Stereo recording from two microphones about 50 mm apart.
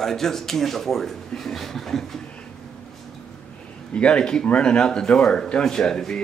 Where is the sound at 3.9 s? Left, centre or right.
Left.